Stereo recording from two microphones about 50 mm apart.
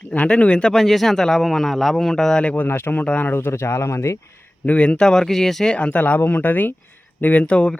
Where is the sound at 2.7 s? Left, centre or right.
Left.